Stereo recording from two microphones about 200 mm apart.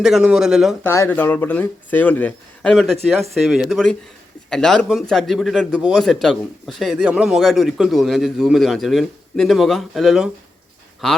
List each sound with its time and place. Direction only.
0.0 s speech: 5° right (ahead or behind)
0.9 s speech: 10° left (ahead or behind)